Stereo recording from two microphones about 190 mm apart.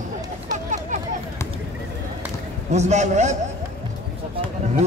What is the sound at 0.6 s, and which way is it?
Chatter, 40° right (ahead or behind).